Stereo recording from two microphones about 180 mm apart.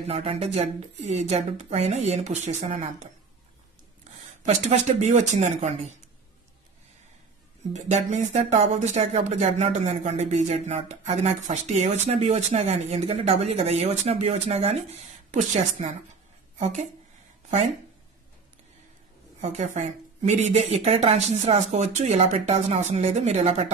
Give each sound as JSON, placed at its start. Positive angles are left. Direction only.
{"t": 0.0, "sound": "speech", "side_deg": -35}
{"t": 4.4, "sound": "speech", "side_deg": -40}
{"t": 7.7, "sound": "a woman's voice", "side_deg": -40}
{"t": 19.4, "sound": "speech", "side_deg": -40}